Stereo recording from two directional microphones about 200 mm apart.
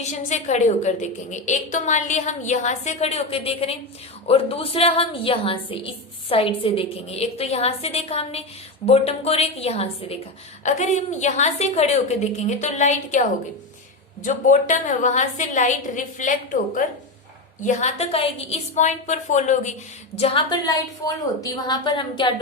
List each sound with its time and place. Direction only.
0.0 s a woman's voice: 35° left (ahead or behind)
14.3 s a woman's voice: 40° left (ahead or behind)
17.6 s a woman's voice: 35° left (ahead or behind)